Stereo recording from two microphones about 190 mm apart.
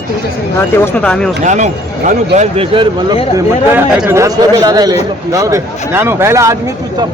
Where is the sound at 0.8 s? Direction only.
5° left (ahead or behind).